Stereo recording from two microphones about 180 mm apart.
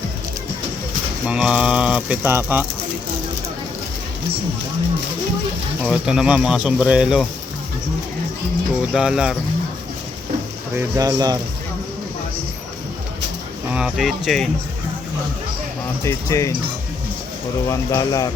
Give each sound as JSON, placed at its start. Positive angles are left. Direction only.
{"t": 1.3, "sound": "speech", "side_deg": -5}
{"t": 5.8, "sound": "speech", "side_deg": 0}
{"t": 8.9, "sound": "speech", "side_deg": -5}
{"t": 10.8, "sound": "speech", "side_deg": -20}
{"t": 13.7, "sound": "speech", "side_deg": -5}
{"t": 16.0, "sound": "speech", "side_deg": 15}
{"t": 17.7, "sound": "speech", "side_deg": 20}